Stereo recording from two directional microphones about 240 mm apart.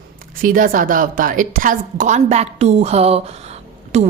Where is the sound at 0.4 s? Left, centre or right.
Right.